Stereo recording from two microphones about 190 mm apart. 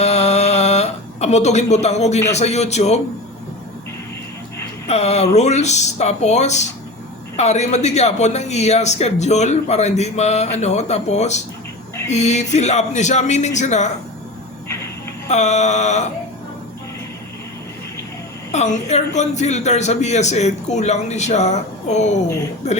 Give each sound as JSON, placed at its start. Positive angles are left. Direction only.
{"t": 0.0, "sound": "a sound", "side_deg": 35}
{"t": 2.3, "sound": "speech", "side_deg": 35}
{"t": 4.9, "sound": "speech", "side_deg": 35}
{"t": 15.3, "sound": "speech", "side_deg": 35}
{"t": 18.5, "sound": "speech", "side_deg": 35}